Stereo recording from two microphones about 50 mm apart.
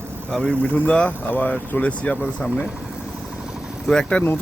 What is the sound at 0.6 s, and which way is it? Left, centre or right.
Speech, left.